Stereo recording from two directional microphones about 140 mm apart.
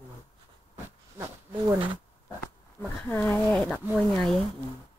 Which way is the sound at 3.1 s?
15° left (ahead or behind).